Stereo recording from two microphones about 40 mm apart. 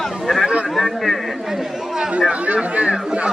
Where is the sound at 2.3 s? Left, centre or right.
Right.